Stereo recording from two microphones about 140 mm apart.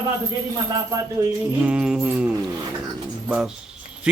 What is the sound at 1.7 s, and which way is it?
Speech, 5° right (ahead or behind).